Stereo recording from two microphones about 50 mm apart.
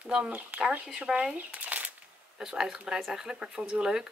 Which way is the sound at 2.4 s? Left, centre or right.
Centre.